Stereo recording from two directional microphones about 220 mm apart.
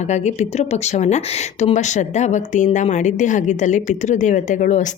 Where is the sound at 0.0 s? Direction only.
30° left (ahead or behind).